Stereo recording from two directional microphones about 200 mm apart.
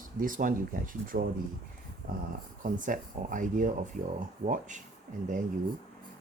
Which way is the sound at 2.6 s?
40° right (ahead or behind).